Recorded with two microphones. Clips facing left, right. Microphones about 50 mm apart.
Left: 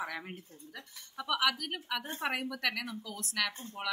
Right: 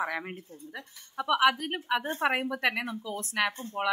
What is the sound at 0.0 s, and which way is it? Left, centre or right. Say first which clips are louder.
Speech: right 7 dB; right.